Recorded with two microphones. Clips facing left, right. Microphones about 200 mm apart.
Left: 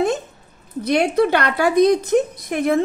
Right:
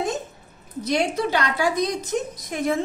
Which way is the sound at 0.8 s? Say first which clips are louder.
Left 6 dB; 60° left (ahead or behind).